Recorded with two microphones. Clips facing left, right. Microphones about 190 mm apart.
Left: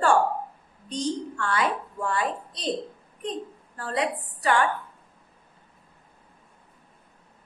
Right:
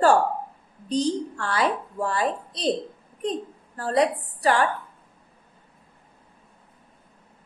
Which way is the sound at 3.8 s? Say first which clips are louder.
Right 6 dB; 40° right (ahead or behind).